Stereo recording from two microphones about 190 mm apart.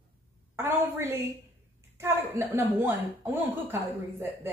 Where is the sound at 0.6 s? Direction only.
10° right (ahead or behind).